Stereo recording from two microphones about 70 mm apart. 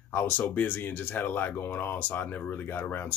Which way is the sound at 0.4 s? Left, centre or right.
Left.